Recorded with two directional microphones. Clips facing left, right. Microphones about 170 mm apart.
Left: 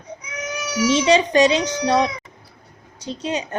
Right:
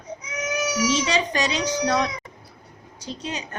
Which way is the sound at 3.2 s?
30° left (ahead or behind).